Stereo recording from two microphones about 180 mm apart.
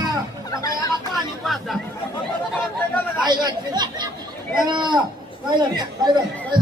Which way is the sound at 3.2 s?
25° right (ahead or behind).